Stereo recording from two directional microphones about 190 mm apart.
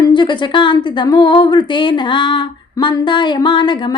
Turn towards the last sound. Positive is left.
turn(degrees=25)  # may be behind; listen again after turning